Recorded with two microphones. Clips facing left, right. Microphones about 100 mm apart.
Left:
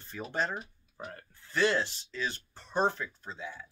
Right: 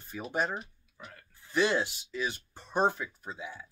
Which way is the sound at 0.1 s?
10° right (ahead or behind).